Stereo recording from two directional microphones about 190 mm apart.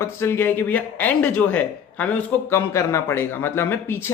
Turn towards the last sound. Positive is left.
turn(degrees=10)  # may be behind; listen again after turning